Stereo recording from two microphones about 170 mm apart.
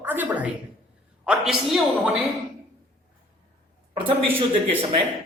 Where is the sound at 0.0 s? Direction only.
10° right (ahead or behind).